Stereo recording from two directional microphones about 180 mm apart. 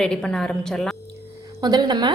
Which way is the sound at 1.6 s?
20° right (ahead or behind).